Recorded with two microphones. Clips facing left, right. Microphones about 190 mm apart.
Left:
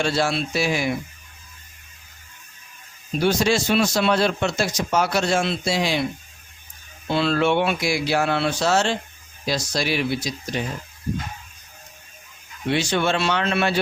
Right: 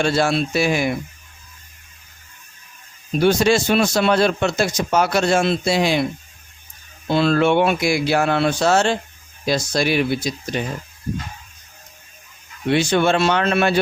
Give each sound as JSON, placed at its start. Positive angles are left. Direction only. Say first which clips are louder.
{"t": 0.0, "sound": "speech", "louder": "right 4 dB", "side_deg": -55}
{"t": 3.2, "sound": "speech", "louder": "right 4 dB", "side_deg": -55}
{"t": 7.1, "sound": "speech", "louder": "right 4 dB", "side_deg": -45}
{"t": 12.7, "sound": "speech", "louder": "right 5 dB", "side_deg": -50}